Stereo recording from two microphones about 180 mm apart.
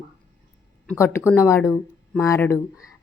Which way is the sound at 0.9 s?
15° left (ahead or behind).